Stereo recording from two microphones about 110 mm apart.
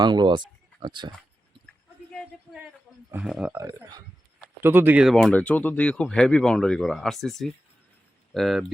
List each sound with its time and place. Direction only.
0.0 s speech: 45° right (ahead or behind)
3.2 s speech: 5° right (ahead or behind)
4.6 s speech: 20° right (ahead or behind)
5.0 s speech: 5° left (ahead or behind)